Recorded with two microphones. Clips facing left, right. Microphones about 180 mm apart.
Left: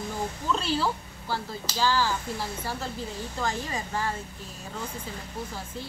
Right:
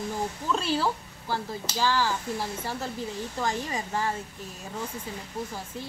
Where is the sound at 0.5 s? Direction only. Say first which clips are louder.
Even; 10° right (ahead or behind).